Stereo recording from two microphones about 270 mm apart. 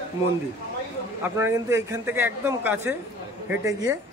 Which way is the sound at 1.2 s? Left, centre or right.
Centre.